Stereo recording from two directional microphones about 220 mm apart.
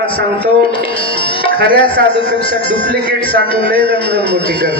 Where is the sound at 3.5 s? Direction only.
25° left (ahead or behind).